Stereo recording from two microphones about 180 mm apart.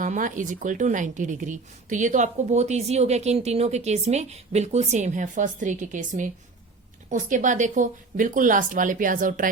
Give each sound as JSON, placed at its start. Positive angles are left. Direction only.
{"t": 0.0, "sound": "a woman's voice", "side_deg": -45}